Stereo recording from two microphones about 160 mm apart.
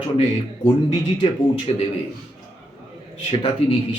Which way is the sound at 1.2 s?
35° left (ahead or behind).